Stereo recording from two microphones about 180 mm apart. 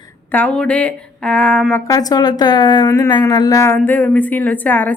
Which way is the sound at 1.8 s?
20° left (ahead or behind).